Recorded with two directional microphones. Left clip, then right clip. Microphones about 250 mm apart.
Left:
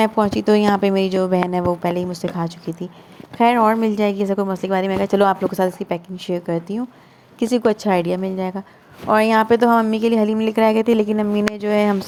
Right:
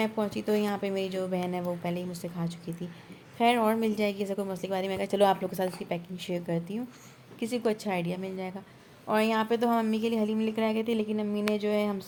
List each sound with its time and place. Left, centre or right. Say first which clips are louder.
0.0 s a woman's voice: left 13 dB; left